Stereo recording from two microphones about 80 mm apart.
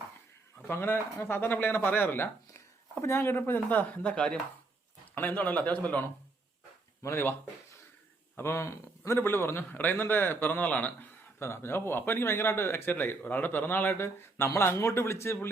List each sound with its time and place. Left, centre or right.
0.7 s speech: left
7.0 s speech: left
8.4 s speech: left
11.3 s speech: left